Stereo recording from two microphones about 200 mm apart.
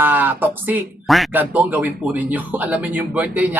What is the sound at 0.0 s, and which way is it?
Speech, 10° right (ahead or behind).